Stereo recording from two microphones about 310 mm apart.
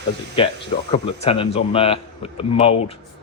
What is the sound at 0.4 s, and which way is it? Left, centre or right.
Speech, centre.